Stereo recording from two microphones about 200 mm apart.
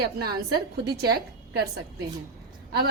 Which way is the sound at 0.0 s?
50° right (ahead or behind).